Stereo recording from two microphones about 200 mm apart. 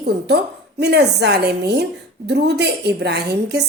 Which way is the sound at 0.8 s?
55° right (ahead or behind).